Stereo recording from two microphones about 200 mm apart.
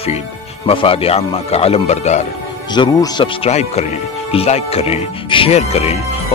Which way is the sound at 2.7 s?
20° left (ahead or behind).